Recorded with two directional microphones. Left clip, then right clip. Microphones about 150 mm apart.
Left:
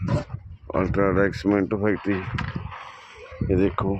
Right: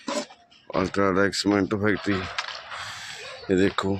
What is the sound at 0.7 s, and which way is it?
Speech, 15° left (ahead or behind).